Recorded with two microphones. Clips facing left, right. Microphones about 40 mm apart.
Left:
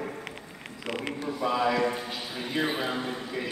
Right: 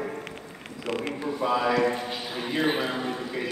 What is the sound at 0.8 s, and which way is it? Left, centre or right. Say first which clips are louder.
Speech: right 3 dB; left.